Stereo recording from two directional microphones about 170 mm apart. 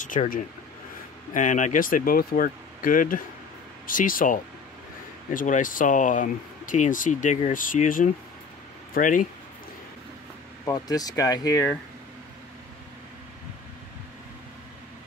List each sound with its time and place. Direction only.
0.0 s speech: 50° left (ahead or behind)
10.6 s speech: 20° left (ahead or behind)